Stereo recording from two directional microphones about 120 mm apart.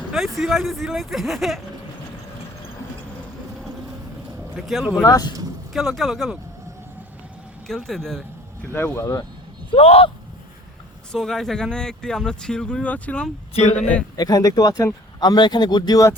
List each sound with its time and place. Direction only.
0.1 s speech: 5° right (ahead or behind)
4.5 s speech: centre (ahead or behind)
5.0 s speech: 30° left (ahead or behind)
5.7 s speech: centre (ahead or behind)
7.7 s speech: centre (ahead or behind)
8.7 s speech: 20° left (ahead or behind)
9.7 s speech: 55° left (ahead or behind)
11.1 s speech: 5° left (ahead or behind)
13.5 s speech: 70° left (ahead or behind)
14.2 s speech: 30° left (ahead or behind)